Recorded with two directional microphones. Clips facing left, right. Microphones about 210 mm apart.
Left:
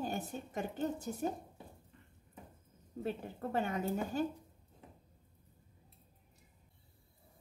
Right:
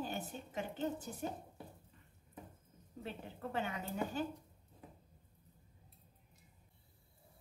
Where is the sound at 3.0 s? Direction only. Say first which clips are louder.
Left 6 dB; 45° left (ahead or behind).